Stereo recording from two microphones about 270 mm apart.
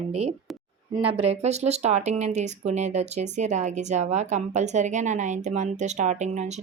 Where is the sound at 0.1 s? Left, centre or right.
Right.